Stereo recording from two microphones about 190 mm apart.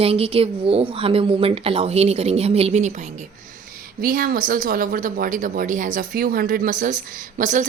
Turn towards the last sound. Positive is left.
turn(degrees=-40)  # may be behind; listen again after turning